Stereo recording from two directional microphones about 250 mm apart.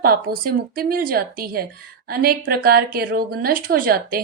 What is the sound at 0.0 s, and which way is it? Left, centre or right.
A woman's voice, right.